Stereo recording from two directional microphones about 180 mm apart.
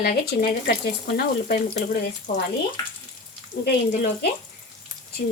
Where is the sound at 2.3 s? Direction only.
45° left (ahead or behind).